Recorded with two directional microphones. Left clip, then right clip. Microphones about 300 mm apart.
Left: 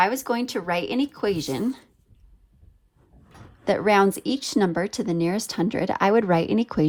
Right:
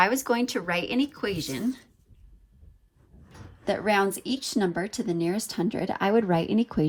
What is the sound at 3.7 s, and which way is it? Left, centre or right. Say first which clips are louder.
Speech: left 5 dB; left.